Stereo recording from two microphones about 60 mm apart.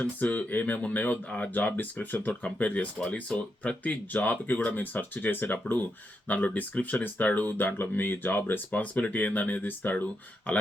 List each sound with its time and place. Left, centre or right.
0.0 s speech: left